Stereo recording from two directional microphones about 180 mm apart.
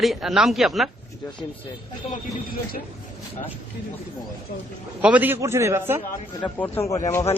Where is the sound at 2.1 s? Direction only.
55° left (ahead or behind).